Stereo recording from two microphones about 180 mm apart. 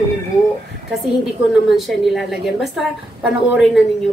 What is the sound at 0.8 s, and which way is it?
A woman's voice, 5° right (ahead or behind).